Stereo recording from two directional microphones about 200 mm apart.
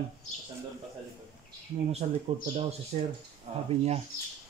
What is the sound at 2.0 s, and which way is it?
Speech, 35° right (ahead or behind).